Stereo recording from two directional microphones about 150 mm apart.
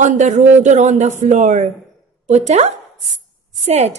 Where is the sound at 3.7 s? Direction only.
45° right (ahead or behind).